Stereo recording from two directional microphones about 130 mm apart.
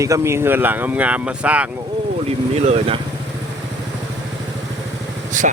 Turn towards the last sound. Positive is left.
turn(degrees=-80)